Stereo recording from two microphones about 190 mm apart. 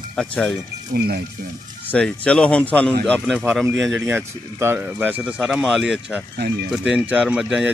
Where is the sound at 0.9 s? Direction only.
55° right (ahead or behind).